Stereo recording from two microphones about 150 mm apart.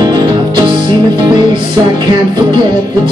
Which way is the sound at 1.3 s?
30° right (ahead or behind).